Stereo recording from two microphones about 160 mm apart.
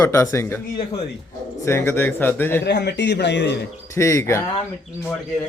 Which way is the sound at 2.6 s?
90° left.